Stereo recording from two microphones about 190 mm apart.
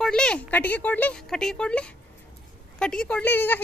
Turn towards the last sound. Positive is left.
turn(degrees=10)  # may be behind; listen again after turning